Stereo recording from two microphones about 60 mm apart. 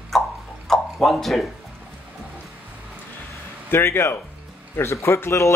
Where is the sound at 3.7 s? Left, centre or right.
Left.